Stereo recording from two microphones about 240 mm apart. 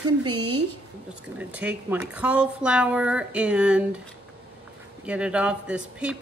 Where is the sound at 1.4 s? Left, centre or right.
Centre.